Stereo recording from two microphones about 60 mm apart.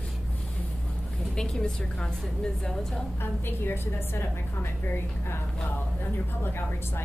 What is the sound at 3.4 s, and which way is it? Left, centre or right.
Speech, left.